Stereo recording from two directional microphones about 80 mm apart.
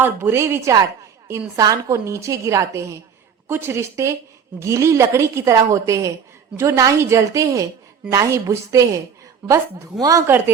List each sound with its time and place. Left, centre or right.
0.0 s a woman's voice: right
1.5 s a woman's voice: right
10.0 s speech: right
10.2 s a woman's voice: right